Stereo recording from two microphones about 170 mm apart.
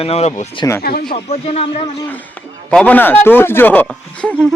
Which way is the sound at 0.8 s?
65° left (ahead or behind).